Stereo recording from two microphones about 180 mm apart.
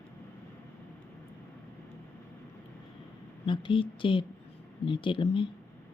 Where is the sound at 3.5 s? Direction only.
30° left (ahead or behind).